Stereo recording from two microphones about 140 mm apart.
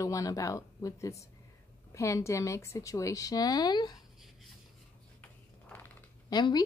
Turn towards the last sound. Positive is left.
turn(degrees=30)  # may be behind; listen again after turning